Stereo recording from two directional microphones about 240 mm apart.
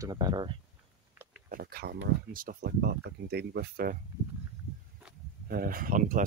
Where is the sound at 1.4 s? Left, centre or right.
Right.